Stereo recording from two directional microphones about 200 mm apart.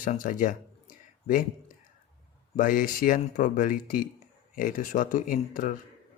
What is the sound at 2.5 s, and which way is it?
Speech, 45° left (ahead or behind).